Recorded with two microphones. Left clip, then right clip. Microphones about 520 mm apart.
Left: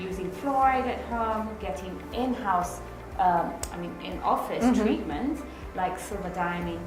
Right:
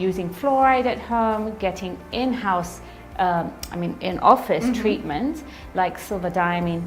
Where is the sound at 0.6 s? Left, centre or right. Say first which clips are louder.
Right 5 dB; right.